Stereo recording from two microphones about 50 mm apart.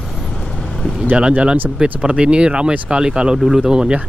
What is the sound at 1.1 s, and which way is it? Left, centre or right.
Speech, right.